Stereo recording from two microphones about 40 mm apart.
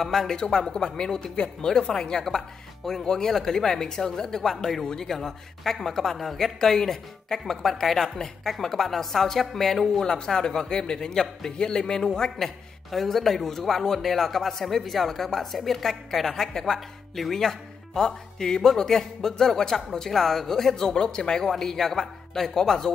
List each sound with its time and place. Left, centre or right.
0.0 s a man's voice: centre
12.9 s a man's voice: centre